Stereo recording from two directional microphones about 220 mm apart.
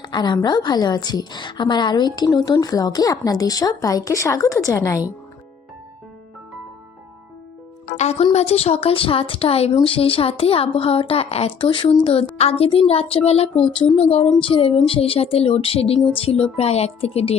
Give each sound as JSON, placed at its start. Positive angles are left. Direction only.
{"t": 0.0, "sound": "a woman's voice", "side_deg": 20}
{"t": 7.9, "sound": "speech", "side_deg": 30}